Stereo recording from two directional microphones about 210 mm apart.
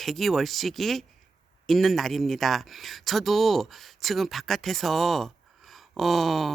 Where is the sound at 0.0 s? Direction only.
Centre (ahead or behind).